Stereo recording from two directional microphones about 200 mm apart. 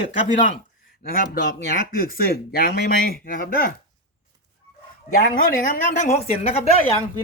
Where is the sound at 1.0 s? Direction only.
45° left (ahead or behind).